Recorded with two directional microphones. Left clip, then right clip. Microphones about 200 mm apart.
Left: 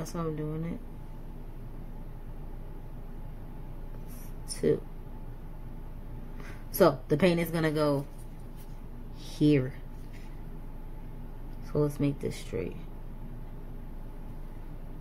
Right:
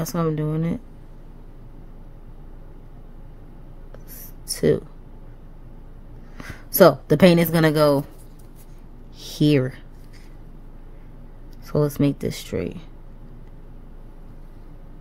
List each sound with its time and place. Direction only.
0.0 s speech: 65° right (ahead or behind)
4.6 s speech: 65° right (ahead or behind)
6.3 s a woman's voice: 60° right (ahead or behind)
9.2 s speech: 65° right (ahead or behind)
11.6 s speech: 60° right (ahead or behind)